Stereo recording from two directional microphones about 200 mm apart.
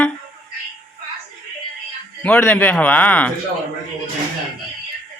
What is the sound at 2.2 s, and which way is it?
Speech, 5° left (ahead or behind).